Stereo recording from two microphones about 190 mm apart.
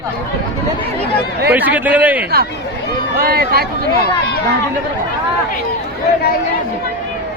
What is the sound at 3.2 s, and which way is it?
Speech, 55° right (ahead or behind).